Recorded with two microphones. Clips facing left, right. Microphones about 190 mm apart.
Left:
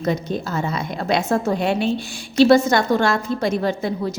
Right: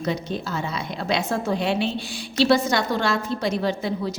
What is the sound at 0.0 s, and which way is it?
A woman's voice, 50° left (ahead or behind).